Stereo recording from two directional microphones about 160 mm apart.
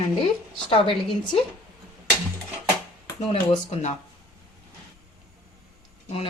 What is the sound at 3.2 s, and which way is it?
Speech, 40° left (ahead or behind).